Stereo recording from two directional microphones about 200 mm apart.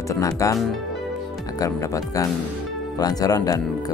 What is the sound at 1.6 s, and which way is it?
Speech, 15° left (ahead or behind).